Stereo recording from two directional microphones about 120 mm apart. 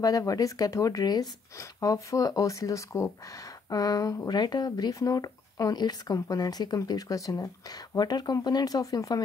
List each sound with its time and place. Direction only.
0.0 s speech: 30° left (ahead or behind)